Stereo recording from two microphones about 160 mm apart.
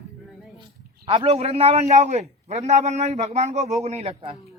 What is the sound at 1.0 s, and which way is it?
A man's voice, 40° right (ahead or behind).